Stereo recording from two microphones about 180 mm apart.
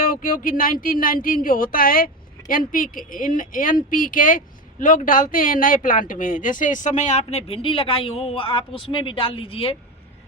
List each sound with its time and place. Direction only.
0.0 s speech: 50° left (ahead or behind); by 9.7 s 30° left (ahead or behind)